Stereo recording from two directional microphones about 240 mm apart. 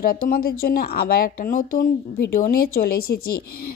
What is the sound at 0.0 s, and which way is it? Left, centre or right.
A woman's voice, left.